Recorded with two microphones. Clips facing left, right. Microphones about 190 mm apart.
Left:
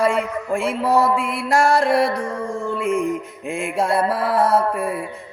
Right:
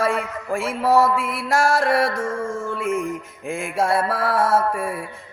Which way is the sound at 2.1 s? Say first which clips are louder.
Even; 15° left (ahead or behind).